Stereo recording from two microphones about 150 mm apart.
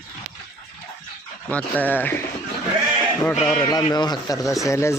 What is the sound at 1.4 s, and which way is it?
Speech, 10° left (ahead or behind).